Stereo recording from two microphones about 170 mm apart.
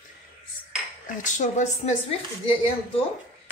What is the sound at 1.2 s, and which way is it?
Speech, 45° left (ahead or behind).